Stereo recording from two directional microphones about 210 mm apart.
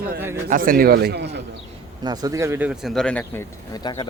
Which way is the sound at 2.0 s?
20° right (ahead or behind).